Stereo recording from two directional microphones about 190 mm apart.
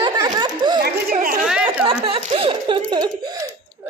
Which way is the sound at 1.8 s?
30° right (ahead or behind).